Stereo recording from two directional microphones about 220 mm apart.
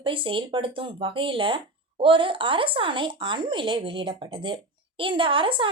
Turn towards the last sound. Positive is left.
turn(degrees=-25)  # may be behind; listen again after turning